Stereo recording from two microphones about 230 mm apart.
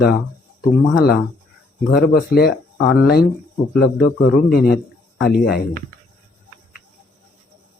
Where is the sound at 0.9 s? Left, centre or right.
Left.